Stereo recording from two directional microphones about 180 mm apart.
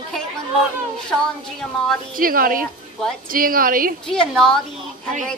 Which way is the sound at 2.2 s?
50° right (ahead or behind).